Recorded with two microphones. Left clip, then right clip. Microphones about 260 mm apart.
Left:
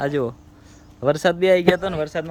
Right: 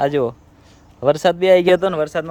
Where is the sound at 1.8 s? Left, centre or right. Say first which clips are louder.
Right 5 dB; centre.